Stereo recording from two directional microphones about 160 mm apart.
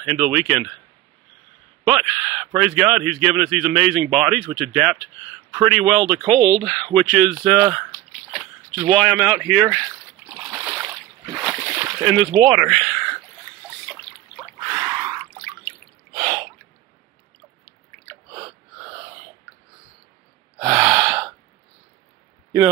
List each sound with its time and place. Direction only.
0.0 s speech: 5° right (ahead or behind)
1.9 s speech: 5° right (ahead or behind)
10.2 s a sound: 20° right (ahead or behind)
11.5 s slosh: 20° right (ahead or behind)
12.0 s speech: 5° right (ahead or behind)
14.7 s drip: 10° right (ahead or behind)
20.6 s gasp: 5° right (ahead or behind)